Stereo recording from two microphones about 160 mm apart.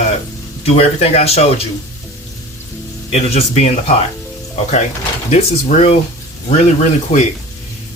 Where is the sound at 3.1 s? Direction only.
40° left (ahead or behind).